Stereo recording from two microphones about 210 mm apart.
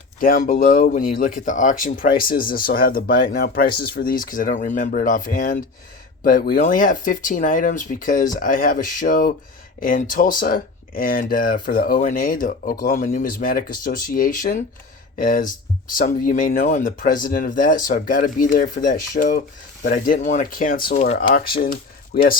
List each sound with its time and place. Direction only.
0.2 s speech: 40° left (ahead or behind)